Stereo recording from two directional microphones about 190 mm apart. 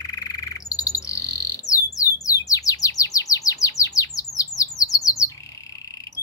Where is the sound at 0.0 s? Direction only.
15° left (ahead or behind).